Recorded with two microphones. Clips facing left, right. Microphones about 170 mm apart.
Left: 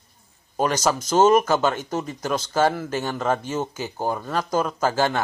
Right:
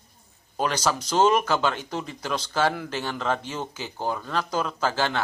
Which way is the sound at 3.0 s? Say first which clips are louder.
Left 3 dB; 10° left (ahead or behind).